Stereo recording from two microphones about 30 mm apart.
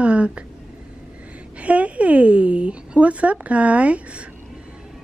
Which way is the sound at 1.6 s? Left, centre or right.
Right.